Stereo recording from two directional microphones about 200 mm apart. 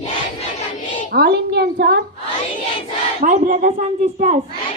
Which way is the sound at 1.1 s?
50° right (ahead or behind).